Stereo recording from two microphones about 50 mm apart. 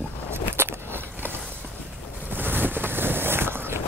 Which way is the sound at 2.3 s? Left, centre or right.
Right.